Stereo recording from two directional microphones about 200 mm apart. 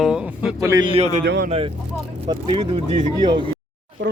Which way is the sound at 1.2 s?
55° right (ahead or behind).